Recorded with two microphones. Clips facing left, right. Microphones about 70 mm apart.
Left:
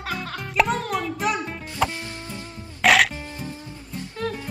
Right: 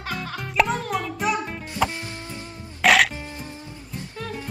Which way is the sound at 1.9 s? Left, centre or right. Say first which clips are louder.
Even; right.